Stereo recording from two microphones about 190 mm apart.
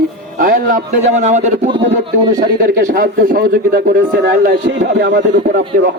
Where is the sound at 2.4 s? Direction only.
50° right (ahead or behind).